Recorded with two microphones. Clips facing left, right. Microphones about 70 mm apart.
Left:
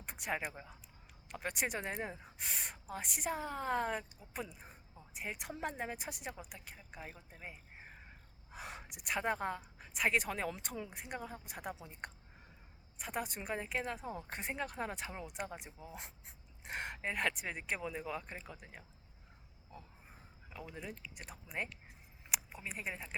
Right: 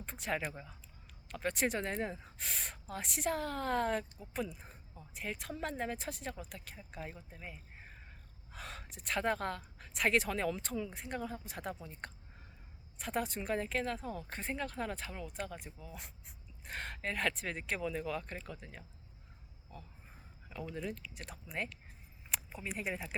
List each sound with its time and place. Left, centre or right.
0.0 s speech: centre
20.5 s speech: centre